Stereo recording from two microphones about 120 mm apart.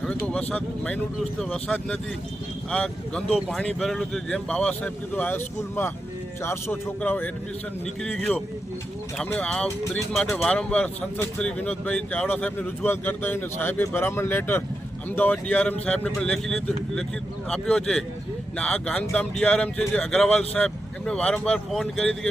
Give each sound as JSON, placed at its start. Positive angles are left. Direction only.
{"t": 0.0, "sound": "speech", "side_deg": 10}
{"t": 9.4, "sound": "speech", "side_deg": 5}